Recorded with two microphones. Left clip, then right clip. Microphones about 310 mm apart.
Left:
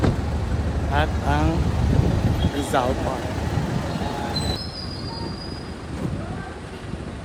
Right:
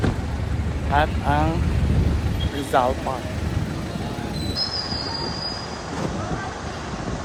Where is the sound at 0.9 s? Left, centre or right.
Centre.